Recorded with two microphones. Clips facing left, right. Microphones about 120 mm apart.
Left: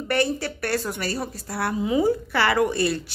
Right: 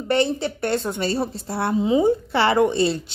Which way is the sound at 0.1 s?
25° right (ahead or behind).